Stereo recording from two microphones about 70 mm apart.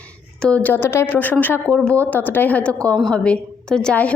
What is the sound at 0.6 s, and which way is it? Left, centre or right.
A woman's voice, left.